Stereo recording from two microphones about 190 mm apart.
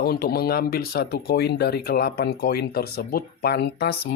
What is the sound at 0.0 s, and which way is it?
Speech, 55° left (ahead or behind).